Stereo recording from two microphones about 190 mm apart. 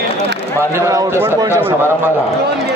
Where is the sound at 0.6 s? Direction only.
15° right (ahead or behind).